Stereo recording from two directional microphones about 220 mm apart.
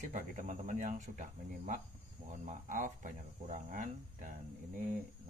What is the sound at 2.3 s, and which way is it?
Speech, 35° right (ahead or behind).